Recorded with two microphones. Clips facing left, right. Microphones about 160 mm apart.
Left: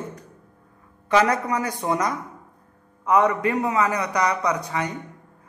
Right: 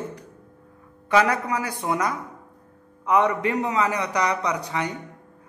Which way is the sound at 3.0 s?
20° right (ahead or behind).